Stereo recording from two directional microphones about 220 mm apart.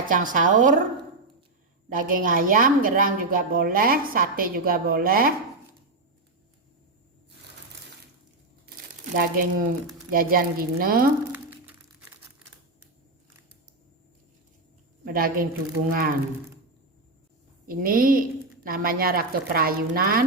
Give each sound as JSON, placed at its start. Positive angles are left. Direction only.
{"t": 0.0, "sound": "a woman's voice", "side_deg": -35}
{"t": 1.9, "sound": "a woman's voice", "side_deg": -40}
{"t": 9.1, "sound": "a woman's voice", "side_deg": -40}
{"t": 11.3, "sound": "a sound", "side_deg": -10}
{"t": 15.0, "sound": "a woman's voice", "side_deg": -40}
{"t": 17.7, "sound": "a woman's voice", "side_deg": -40}